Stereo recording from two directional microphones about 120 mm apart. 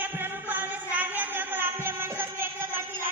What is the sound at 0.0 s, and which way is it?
Music, 15° right (ahead or behind).